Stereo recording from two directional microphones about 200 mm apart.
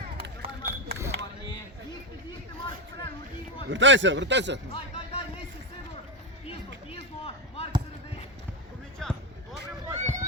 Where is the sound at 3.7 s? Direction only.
65° right (ahead or behind).